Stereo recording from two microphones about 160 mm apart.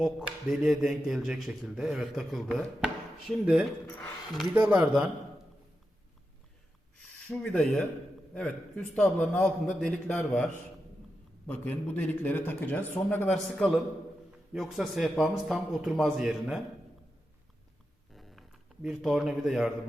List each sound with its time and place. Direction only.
0.0 s speech: centre (ahead or behind)
3.8 s speech: 15° left (ahead or behind)
4.5 s speech: 10° right (ahead or behind)
7.3 s speech: 5° left (ahead or behind)
18.1 s a sound: centre (ahead or behind)